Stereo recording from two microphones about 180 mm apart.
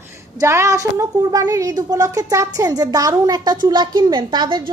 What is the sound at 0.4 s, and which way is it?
A woman's voice, 15° right (ahead or behind).